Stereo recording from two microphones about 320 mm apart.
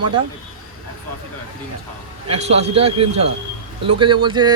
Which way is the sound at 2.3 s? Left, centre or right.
Centre.